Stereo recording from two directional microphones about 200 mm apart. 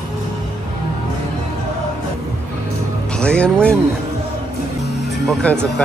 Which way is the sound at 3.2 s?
5° left (ahead or behind).